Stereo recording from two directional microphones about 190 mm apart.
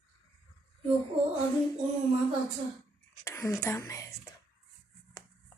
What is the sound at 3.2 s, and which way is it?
Speech, 15° left (ahead or behind).